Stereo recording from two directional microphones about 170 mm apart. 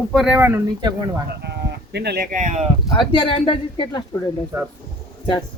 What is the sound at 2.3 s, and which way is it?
Speech, 45° right (ahead or behind).